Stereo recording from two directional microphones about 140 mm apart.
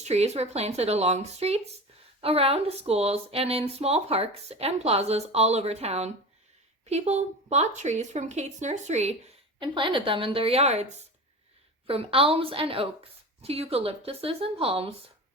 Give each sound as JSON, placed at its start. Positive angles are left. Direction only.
{"t": 0.0, "sound": "a woman's voice", "side_deg": -50}
{"t": 9.6, "sound": "a woman's voice", "side_deg": -35}
{"t": 11.9, "sound": "speech", "side_deg": -45}